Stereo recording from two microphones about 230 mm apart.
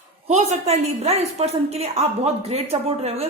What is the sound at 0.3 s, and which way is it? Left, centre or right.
Speech, right.